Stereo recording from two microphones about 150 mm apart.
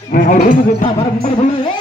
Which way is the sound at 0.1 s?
65° left (ahead or behind).